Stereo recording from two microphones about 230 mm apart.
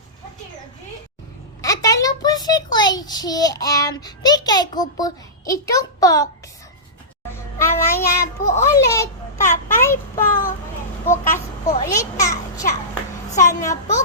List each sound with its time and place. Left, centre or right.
1.6 s a child's voice: centre
7.3 s children playing: centre
8.7 s a child's voice: centre
12.9 s a sound: centre